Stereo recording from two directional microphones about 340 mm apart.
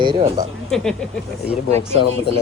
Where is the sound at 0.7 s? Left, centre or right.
Centre.